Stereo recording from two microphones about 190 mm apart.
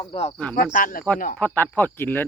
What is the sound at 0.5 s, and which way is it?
Cricket, 45° left (ahead or behind).